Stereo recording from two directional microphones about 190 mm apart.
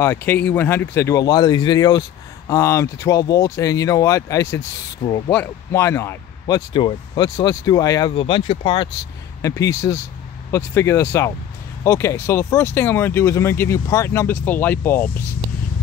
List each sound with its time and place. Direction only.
0.0 s speech: 10° left (ahead or behind); by 8.8 s 25° left (ahead or behind)
9.4 s speech: 15° left (ahead or behind)